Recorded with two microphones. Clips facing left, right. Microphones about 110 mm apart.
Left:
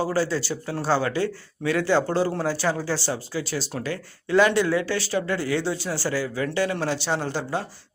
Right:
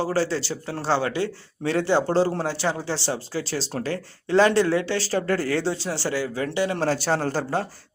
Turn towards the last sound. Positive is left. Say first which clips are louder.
# right 2 dB
turn(degrees=-40)  # may be behind; listen again after turning